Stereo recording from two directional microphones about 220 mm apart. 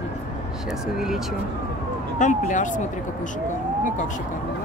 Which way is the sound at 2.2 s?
35° left (ahead or behind).